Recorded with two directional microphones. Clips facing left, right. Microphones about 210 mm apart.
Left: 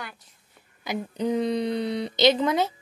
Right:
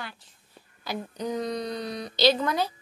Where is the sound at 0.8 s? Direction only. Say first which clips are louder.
Left 5 dB; 25° left (ahead or behind).